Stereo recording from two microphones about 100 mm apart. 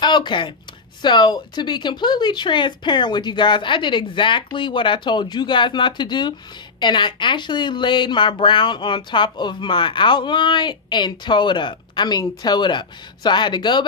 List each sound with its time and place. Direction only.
0.0 s speech: 50° left (ahead or behind)